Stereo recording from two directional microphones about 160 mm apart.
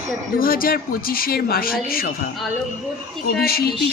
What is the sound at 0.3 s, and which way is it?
Speech, 65° left (ahead or behind).